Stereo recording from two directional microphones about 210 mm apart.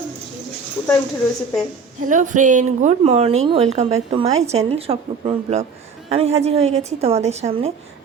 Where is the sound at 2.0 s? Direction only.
35° right (ahead or behind).